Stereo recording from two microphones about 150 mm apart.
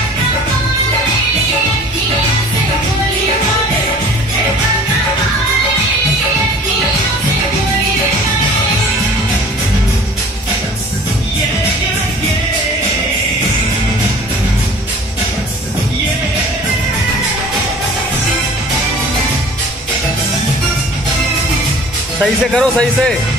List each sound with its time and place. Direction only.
22.2 s speech: 5° left (ahead or behind)